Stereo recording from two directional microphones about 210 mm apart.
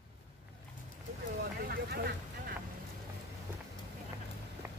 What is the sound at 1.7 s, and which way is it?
Vehicle, 45° right (ahead or behind).